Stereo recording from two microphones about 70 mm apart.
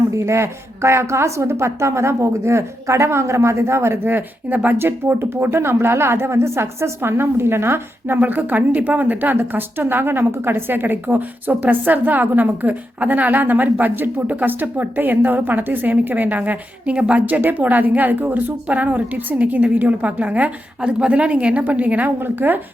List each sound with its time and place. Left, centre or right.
0.1 s a woman's voice: right